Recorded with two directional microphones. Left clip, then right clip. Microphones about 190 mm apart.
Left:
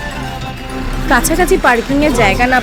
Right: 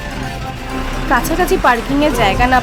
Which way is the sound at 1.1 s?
10° left (ahead or behind).